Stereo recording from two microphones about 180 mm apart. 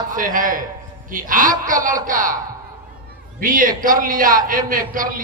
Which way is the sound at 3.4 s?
50° right (ahead or behind).